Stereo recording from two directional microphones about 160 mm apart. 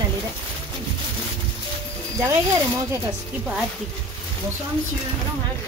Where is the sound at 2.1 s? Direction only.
20° right (ahead or behind).